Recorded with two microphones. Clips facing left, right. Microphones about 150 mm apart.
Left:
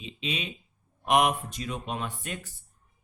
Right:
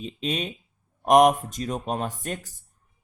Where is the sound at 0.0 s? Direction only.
45° right (ahead or behind).